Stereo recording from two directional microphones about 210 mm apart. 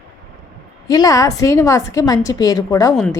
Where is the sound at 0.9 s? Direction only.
15° left (ahead or behind).